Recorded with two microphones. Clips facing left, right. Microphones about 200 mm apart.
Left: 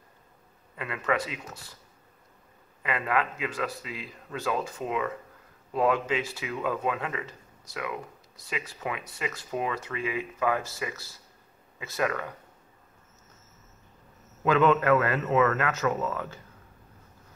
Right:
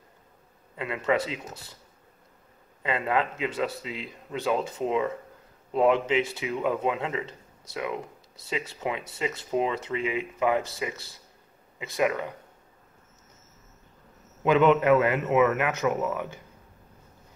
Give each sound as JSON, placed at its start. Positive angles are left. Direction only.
{"t": 0.7, "sound": "speech", "side_deg": -25}
{"t": 2.8, "sound": "speech", "side_deg": -25}
{"t": 12.0, "sound": "speech", "side_deg": -20}
{"t": 14.4, "sound": "a man's voice", "side_deg": -20}